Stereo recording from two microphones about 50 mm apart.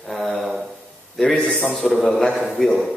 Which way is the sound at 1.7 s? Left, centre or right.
Centre.